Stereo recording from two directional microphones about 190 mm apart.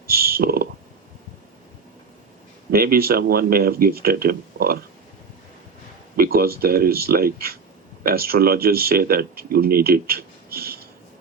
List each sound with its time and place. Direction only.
0.1 s speech: 50° right (ahead or behind)
2.6 s speech: 50° right (ahead or behind)
6.1 s speech: 50° right (ahead or behind)